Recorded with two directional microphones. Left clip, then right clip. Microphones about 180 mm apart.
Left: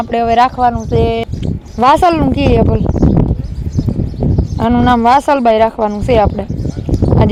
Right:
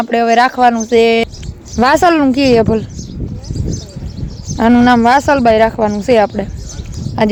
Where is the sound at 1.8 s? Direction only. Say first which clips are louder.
Even; 15° right (ahead or behind).